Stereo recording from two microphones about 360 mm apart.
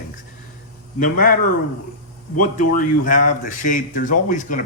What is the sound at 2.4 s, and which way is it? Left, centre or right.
Speech, left.